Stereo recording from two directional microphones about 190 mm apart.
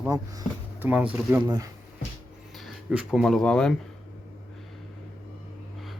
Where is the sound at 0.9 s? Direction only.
5° right (ahead or behind).